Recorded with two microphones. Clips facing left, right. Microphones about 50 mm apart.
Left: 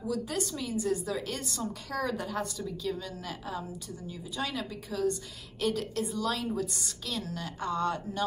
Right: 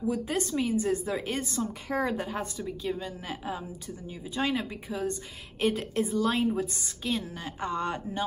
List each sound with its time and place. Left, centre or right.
0.1 s a woman's voice: right